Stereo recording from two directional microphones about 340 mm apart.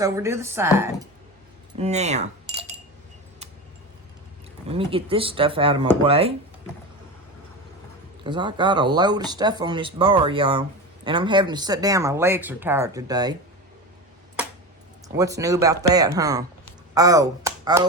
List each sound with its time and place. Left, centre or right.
0.0 s speech: centre
1.8 s keys jangling: centre
4.7 s speech: centre
8.2 s speech: centre
15.0 s speech: centre